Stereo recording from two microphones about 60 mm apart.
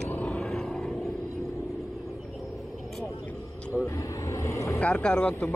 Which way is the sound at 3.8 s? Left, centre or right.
Left.